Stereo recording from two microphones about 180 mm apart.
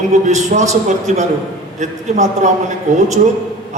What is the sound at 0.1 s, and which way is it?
A man's voice, 40° right (ahead or behind).